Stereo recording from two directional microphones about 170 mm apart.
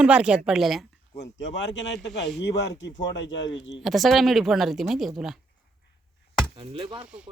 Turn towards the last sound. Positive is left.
turn(degrees=-5)  # may be behind; listen again after turning